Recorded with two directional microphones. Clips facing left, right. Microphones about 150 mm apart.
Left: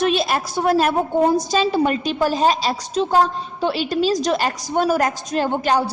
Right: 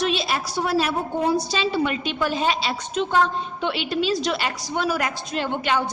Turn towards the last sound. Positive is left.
turn(degrees=40)  # may be behind; listen again after turning